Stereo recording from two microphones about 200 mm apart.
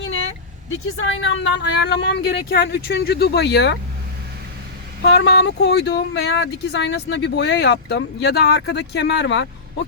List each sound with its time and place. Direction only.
0.9 s speech: 65° left (ahead or behind)
5.0 s speech: 60° left (ahead or behind)